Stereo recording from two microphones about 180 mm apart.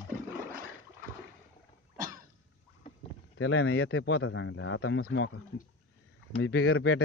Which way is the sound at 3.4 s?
90° left.